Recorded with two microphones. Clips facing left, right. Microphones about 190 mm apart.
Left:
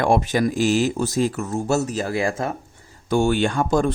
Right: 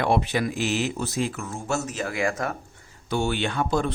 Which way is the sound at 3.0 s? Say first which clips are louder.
Left 6 dB; 45° left (ahead or behind).